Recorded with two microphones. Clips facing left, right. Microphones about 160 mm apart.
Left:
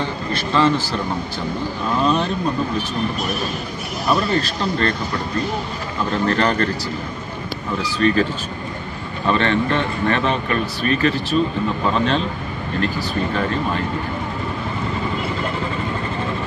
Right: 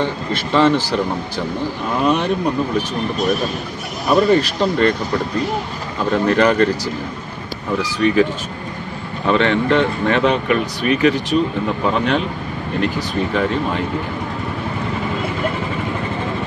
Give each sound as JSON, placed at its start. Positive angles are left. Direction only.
{"t": 2.0, "sound": "speech", "side_deg": -15}
{"t": 4.1, "sound": "speech", "side_deg": -15}
{"t": 6.2, "sound": "speech", "side_deg": -15}
{"t": 8.0, "sound": "speech", "side_deg": -15}
{"t": 9.3, "sound": "speech", "side_deg": -15}